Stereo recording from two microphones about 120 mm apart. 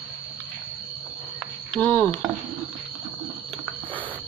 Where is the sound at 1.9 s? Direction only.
20° left (ahead or behind).